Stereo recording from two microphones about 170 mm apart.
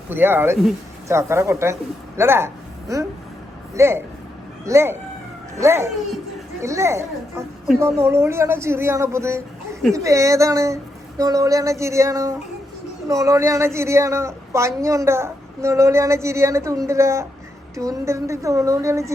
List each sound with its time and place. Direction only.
0.1 s speech: 10° right (ahead or behind)
11.2 s a sound: 20° right (ahead or behind)
13.1 s speech: 20° right (ahead or behind)